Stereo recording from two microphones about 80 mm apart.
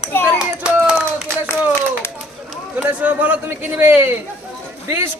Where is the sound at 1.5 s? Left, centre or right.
Centre.